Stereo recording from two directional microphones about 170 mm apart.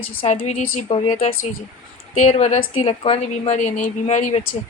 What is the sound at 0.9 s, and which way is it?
Speech, 35° left (ahead or behind).